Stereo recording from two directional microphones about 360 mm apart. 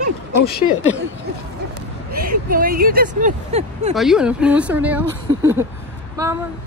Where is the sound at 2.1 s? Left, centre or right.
Right.